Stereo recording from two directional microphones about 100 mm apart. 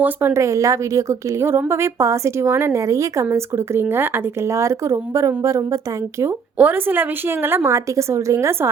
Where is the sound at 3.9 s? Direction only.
20° right (ahead or behind).